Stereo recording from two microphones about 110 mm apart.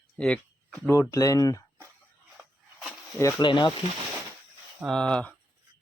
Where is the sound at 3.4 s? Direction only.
45° left (ahead or behind).